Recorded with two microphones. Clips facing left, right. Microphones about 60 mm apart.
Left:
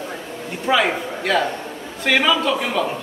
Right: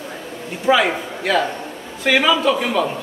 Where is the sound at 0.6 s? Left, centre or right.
Centre.